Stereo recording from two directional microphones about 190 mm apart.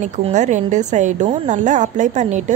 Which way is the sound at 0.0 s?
40° right (ahead or behind).